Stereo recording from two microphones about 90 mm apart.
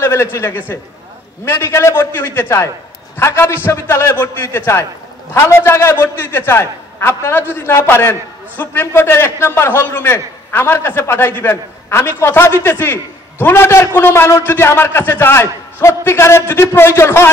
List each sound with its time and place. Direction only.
0.0 s a man's voice: 30° left (ahead or behind)